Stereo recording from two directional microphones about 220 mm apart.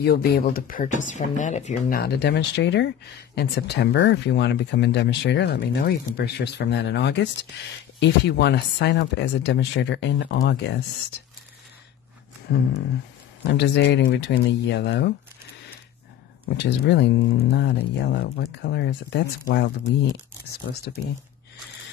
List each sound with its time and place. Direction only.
0.0 s speech: 45° left (ahead or behind)
12.5 s speech: 50° left (ahead or behind)
16.5 s speech: 50° left (ahead or behind)